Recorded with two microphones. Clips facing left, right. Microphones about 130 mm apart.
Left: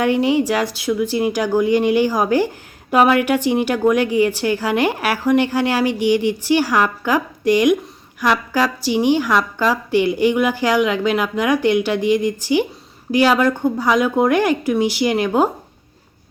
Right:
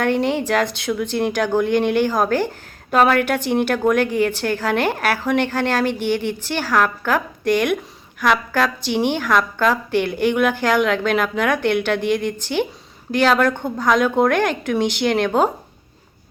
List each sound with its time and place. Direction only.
0.0 s a woman's voice: 10° left (ahead or behind)
10.0 s a woman's voice: 55° right (ahead or behind)
10.2 s a woman's voice: 10° left (ahead or behind)
12.0 s speech: 60° right (ahead or behind)
12.4 s a woman's voice: 10° left (ahead or behind)